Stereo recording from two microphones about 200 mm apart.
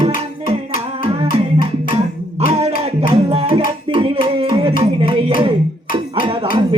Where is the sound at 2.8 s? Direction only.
30° right (ahead or behind).